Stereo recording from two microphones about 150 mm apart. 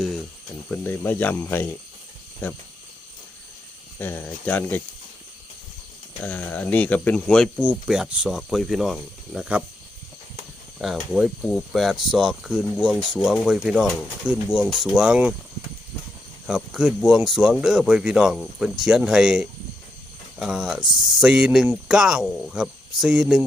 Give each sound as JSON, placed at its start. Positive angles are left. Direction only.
{"t": 0.7, "sound": "speech", "side_deg": 15}
{"t": 3.9, "sound": "speech", "side_deg": 15}
{"t": 6.2, "sound": "speech", "side_deg": 10}
{"t": 10.8, "sound": "speech", "side_deg": -5}
{"t": 16.5, "sound": "speech", "side_deg": -5}